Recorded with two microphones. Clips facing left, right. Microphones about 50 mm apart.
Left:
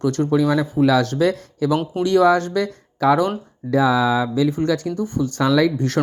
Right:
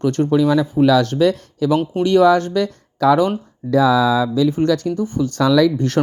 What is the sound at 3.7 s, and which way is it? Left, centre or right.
Speech, right.